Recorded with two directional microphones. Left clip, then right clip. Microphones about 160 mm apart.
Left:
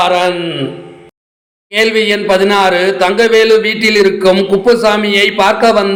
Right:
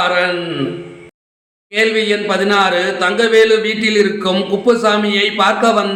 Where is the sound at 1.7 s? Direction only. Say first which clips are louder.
Left 3 dB; 30° left (ahead or behind).